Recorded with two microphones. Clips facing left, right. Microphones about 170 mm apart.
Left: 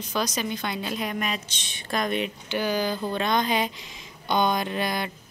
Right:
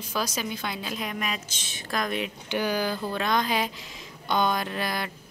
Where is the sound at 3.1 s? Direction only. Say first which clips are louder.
Left 2 dB; centre (ahead or behind).